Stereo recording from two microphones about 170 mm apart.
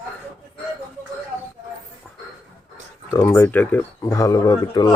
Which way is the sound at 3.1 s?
15° left (ahead or behind).